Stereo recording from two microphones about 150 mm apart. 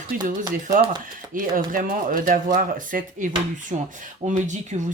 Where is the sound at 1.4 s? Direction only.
65° right (ahead or behind).